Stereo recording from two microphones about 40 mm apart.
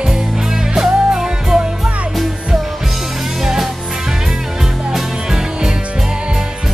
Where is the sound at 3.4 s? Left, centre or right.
Centre.